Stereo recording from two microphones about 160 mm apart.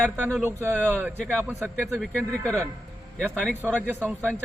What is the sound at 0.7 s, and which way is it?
Speech, 5° left (ahead or behind).